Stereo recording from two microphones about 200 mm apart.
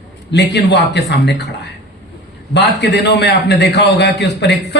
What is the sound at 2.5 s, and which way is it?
A man's voice, 60° left (ahead or behind).